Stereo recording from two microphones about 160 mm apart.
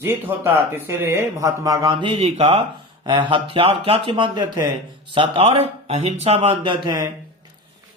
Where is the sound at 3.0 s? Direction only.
30° right (ahead or behind).